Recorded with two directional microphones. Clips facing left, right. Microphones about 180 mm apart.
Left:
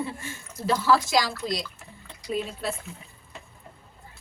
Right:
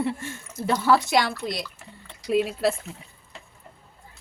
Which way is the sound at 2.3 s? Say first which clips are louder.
Right 7 dB; 80° right.